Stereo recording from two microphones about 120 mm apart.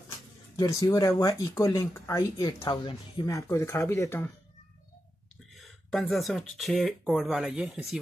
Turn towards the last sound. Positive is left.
turn(degrees=-5)  # may be behind; listen again after turning